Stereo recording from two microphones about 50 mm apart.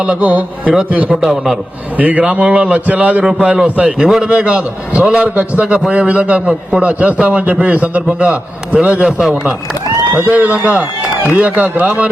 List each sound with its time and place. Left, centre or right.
0.2 s a man's voice: right
1.1 s a man's voice: centre
2.0 s a man's voice: right
3.2 s a man's voice: centre
6.4 s a man's voice: centre
10.4 s a man's voice: right